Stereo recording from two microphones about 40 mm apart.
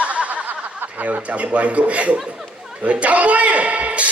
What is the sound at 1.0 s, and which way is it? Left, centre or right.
Speech, right.